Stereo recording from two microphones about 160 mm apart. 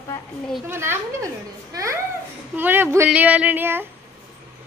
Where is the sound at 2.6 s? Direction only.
15° right (ahead or behind).